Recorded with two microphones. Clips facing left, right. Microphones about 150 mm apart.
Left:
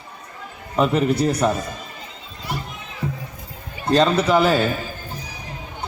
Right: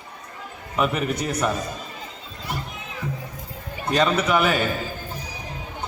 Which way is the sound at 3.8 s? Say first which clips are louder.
Left 4 dB; 30° left (ahead or behind).